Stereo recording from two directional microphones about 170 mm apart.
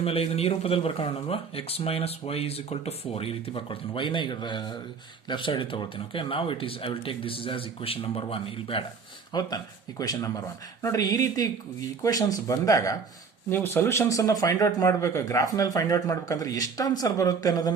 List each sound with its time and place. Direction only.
0.0 s speech: 35° left (ahead or behind)